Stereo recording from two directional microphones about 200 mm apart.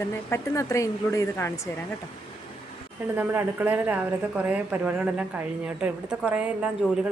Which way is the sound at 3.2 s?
10° right (ahead or behind).